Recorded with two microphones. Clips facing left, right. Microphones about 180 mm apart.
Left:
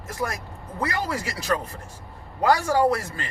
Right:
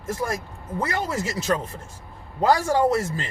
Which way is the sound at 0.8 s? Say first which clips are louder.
Right 1 dB; 25° right (ahead or behind).